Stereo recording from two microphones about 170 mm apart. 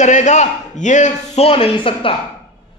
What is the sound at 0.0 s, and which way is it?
A man's voice, 45° left (ahead or behind).